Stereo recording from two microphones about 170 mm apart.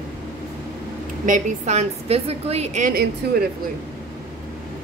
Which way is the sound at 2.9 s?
65° right (ahead or behind).